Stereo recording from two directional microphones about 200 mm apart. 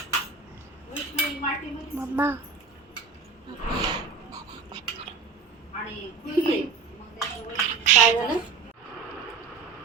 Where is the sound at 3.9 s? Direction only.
20° right (ahead or behind).